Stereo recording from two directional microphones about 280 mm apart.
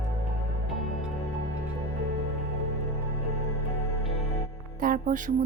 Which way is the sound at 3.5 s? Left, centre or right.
Left.